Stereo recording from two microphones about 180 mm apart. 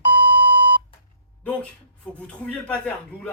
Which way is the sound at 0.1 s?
65° right (ahead or behind).